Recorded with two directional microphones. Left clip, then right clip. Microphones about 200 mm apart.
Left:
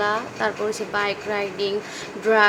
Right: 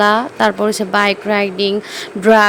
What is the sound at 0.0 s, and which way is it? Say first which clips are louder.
Speech: right 10 dB; 45° right (ahead or behind).